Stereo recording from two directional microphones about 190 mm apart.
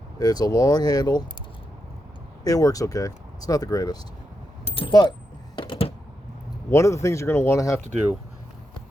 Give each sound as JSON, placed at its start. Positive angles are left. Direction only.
{"t": 0.2, "sound": "speech", "side_deg": 20}
{"t": 2.4, "sound": "speech", "side_deg": 20}
{"t": 5.5, "sound": "typing", "side_deg": 30}
{"t": 6.7, "sound": "speech", "side_deg": 15}